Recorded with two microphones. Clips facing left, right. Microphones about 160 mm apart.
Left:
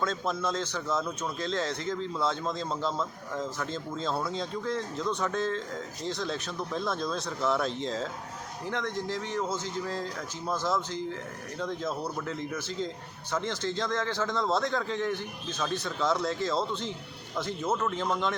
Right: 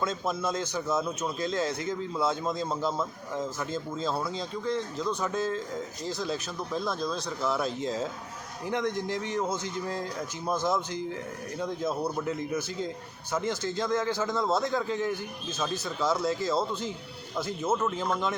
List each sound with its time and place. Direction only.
0.0 s a man's voice: 10° right (ahead or behind)